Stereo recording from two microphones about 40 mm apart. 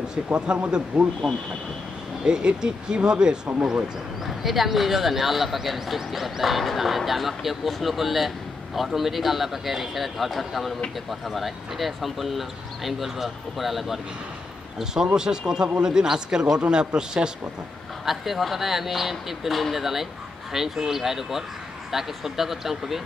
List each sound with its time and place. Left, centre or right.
0.3 s speech: right
2.2 s speech: right
4.3 s speech: centre
15.1 s speech: centre
18.0 s speech: centre